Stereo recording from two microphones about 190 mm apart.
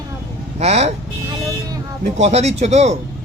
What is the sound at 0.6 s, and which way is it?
Speech, 35° right (ahead or behind).